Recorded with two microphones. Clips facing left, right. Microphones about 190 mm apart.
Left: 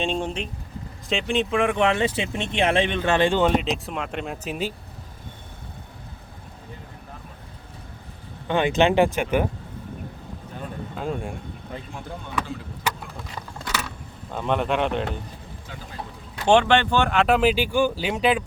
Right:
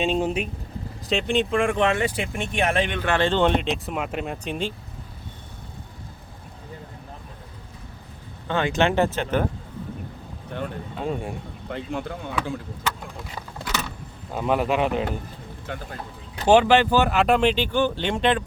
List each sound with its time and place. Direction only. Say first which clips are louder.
0.0 s speech: right 3 dB; 5° right (ahead or behind)
2.0 s speech: left 1 dB; 25° left (ahead or behind); by 4.7 s 5° left (ahead or behind)
8.4 s speech: left 2 dB; 15° left (ahead or behind)
10.9 s speech: even; centre (ahead or behind)
11.7 s speech: right 8 dB; 65° right (ahead or behind)
14.3 s speech: right 1 dB; 5° right (ahead or behind)
15.7 s speech: right 8 dB; 65° right (ahead or behind)
16.5 s speech: right 2 dB; 5° right (ahead or behind)